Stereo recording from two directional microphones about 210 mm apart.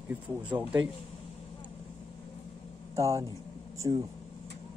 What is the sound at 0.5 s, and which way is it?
Speech, 10° right (ahead or behind).